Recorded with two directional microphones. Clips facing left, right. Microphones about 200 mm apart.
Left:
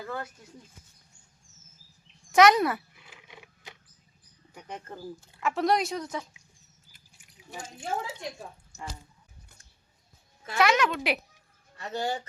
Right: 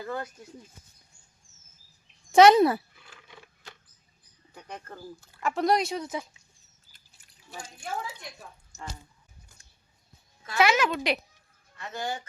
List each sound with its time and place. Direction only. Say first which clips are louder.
2.3 s speech: right 4 dB; 30° right (ahead or behind)
2.9 s a sound: even; 15° left (ahead or behind)
4.5 s speech: left 1 dB; 15° left (ahead or behind)
5.4 s speech: right 1 dB; centre (ahead or behind)
6.9 s a sound: left 6 dB; 15° left (ahead or behind)
10.6 s speech: even; 5° right (ahead or behind)
11.8 s speech: left 3 dB; 35° left (ahead or behind)